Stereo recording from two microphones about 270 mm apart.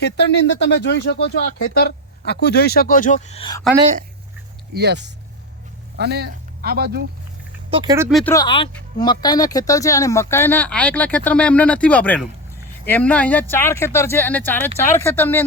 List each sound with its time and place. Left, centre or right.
0.0 s speech: left; by 3.6 s centre
4.7 s speech: right
7.7 s speech: centre
8.1 s speech: centre